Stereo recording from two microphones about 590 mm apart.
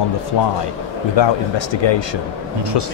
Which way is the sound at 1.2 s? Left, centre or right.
Left.